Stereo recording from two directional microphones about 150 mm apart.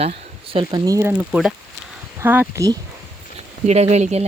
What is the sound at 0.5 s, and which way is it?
Speech, 25° right (ahead or behind).